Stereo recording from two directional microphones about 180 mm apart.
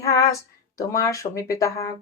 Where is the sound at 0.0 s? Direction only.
15° left (ahead or behind).